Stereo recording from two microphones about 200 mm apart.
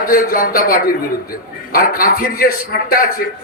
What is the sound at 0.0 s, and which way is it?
A man's voice, 45° left (ahead or behind).